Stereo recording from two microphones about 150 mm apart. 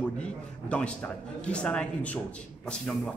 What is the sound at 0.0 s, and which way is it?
A man's voice, 5° left (ahead or behind).